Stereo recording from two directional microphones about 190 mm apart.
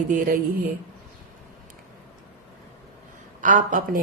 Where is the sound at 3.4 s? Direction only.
45° right (ahead or behind).